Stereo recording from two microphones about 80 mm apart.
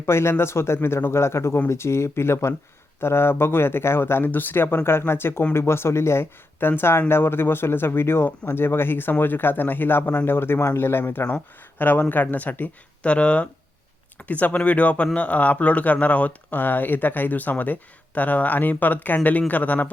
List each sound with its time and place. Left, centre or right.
0.0 s speech: left